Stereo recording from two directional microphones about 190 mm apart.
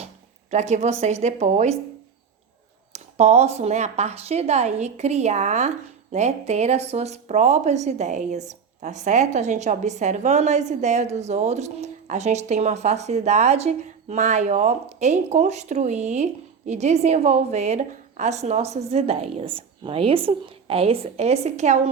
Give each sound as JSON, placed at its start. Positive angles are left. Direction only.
{"t": 0.5, "sound": "a woman's voice", "side_deg": -35}
{"t": 2.9, "sound": "a woman's voice", "side_deg": -35}